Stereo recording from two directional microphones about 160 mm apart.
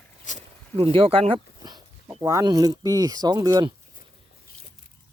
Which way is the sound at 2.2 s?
20° right (ahead or behind).